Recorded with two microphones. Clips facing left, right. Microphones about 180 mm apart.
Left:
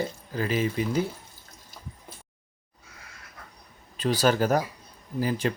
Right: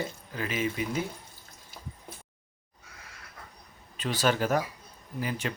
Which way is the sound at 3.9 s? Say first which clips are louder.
Left 4 dB; 40° left (ahead or behind).